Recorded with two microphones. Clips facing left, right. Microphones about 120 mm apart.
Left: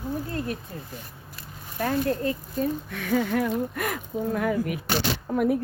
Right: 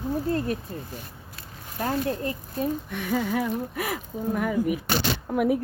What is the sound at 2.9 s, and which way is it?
Speech, 5° right (ahead or behind).